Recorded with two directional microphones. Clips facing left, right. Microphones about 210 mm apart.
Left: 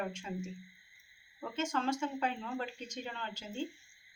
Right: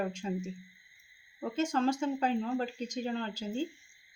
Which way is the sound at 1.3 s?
35° right (ahead or behind).